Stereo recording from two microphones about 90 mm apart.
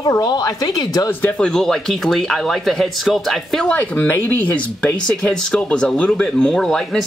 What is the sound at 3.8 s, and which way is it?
Speech, 20° left (ahead or behind).